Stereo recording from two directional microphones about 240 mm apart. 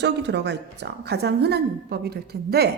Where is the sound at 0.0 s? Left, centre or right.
Right.